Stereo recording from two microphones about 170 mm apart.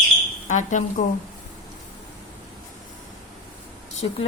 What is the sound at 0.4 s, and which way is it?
Speech, 45° left (ahead or behind).